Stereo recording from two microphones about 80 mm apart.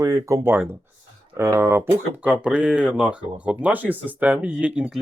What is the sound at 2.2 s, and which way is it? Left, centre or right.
Speech, centre.